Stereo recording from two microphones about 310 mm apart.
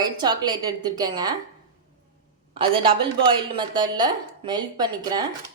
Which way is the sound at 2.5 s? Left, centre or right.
Centre.